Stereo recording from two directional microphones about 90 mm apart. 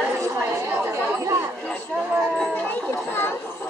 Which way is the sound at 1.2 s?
35° right (ahead or behind).